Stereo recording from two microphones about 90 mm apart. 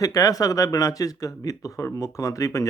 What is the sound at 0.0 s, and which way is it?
Speech, 40° left (ahead or behind).